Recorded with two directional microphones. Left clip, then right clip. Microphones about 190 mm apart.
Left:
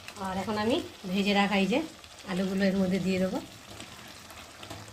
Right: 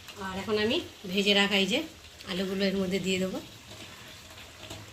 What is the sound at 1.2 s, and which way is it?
Speech, 60° left (ahead or behind).